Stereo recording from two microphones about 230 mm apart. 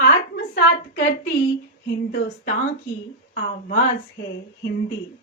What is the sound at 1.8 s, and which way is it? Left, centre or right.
Speech, left.